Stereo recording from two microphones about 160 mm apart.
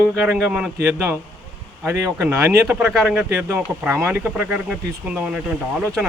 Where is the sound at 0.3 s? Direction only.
5° right (ahead or behind).